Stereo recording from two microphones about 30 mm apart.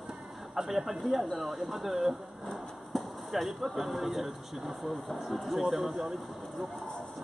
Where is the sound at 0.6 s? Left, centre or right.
Centre.